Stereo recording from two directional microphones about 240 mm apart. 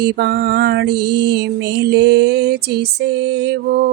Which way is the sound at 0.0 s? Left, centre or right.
Right.